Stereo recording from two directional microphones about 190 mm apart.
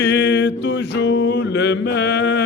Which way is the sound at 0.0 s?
65° left (ahead or behind).